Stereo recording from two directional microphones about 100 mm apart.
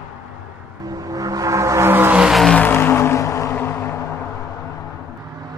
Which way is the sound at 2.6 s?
20° left (ahead or behind).